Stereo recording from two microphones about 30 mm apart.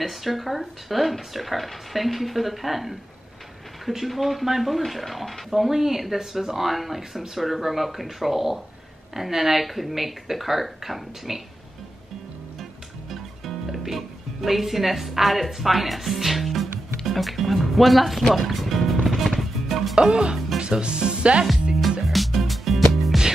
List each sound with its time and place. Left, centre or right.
0.0 s speech: centre
4.1 s speech: centre
5.6 s speech: centre
13.7 s speech: centre
18.3 s music: centre
19.0 s chopping: centre
20.0 s speech: right
22.0 s music: centre